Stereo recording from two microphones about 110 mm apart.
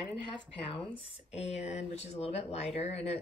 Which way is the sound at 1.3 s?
80° left.